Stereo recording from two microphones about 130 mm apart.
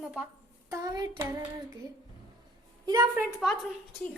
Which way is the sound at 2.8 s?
30° right (ahead or behind).